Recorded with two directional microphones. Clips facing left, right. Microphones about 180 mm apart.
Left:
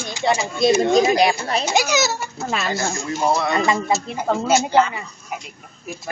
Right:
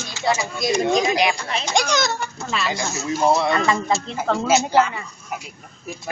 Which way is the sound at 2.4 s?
45° left (ahead or behind).